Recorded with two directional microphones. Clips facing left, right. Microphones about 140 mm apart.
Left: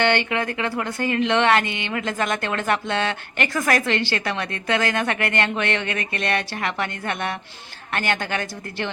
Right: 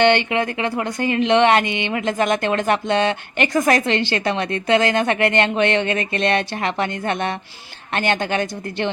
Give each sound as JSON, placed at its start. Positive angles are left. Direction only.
{"t": 0.0, "sound": "speech", "side_deg": -20}